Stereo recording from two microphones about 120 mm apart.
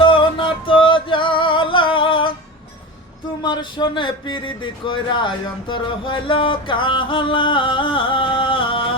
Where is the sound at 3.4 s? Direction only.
40° left (ahead or behind).